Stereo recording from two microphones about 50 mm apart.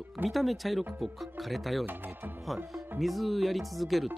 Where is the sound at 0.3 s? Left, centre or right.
Centre.